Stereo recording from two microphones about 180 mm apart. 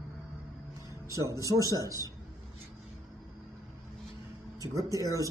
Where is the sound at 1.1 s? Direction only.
20° right (ahead or behind).